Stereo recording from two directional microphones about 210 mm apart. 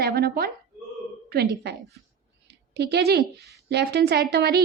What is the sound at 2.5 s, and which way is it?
A woman's voice, 50° right (ahead or behind).